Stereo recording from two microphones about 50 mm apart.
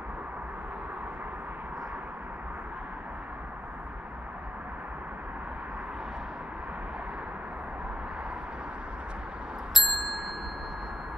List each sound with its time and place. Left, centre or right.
9.8 s ding: centre